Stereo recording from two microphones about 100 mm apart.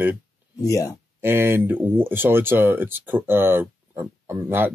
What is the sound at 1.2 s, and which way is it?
Speech, 25° right (ahead or behind).